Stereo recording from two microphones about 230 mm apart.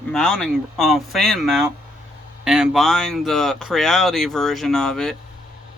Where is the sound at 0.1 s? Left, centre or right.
Centre.